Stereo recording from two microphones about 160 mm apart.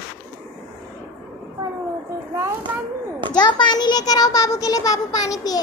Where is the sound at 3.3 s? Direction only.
25° left (ahead or behind).